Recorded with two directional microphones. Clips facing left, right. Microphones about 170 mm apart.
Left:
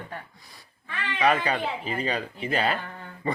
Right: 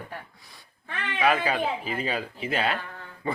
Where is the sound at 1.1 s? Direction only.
5° right (ahead or behind).